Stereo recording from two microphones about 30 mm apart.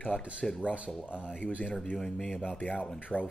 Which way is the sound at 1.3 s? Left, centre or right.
Left.